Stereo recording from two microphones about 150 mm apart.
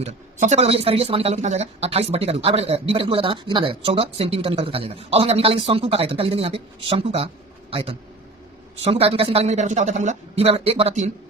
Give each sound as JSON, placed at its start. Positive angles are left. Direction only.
{"t": 0.0, "sound": "a woman's voice", "side_deg": -50}